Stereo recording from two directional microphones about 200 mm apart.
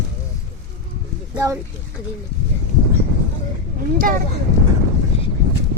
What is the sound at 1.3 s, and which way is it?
Speech, 15° right (ahead or behind).